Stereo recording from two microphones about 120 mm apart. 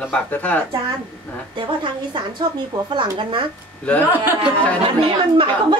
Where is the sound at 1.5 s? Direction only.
40° right (ahead or behind).